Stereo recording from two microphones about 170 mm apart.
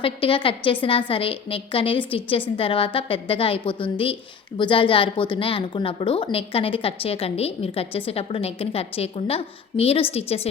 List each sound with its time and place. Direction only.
0.0 s a woman's voice: 30° left (ahead or behind)